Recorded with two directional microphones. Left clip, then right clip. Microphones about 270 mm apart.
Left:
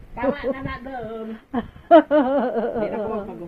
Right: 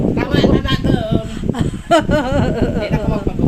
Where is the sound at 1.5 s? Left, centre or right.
Centre.